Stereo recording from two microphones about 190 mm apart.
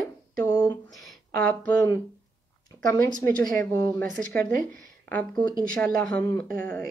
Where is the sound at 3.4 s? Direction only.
Centre (ahead or behind).